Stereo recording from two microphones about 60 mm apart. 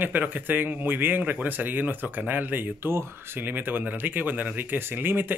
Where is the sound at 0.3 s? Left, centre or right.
Right.